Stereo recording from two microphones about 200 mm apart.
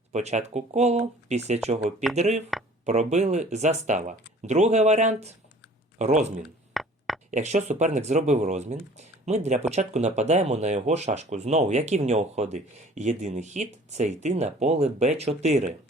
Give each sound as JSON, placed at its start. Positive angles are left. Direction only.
{"t": 0.1, "sound": "speech", "side_deg": -35}
{"t": 6.8, "sound": "a sound", "side_deg": 0}
{"t": 7.3, "sound": "speech", "side_deg": -35}